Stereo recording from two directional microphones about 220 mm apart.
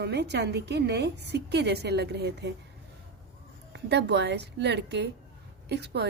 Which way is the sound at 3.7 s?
50° right (ahead or behind).